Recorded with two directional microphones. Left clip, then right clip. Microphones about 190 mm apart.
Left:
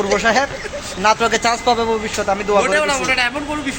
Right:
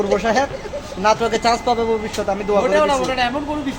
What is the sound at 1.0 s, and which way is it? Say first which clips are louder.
Speech: left 1 dB; 10° left (ahead or behind).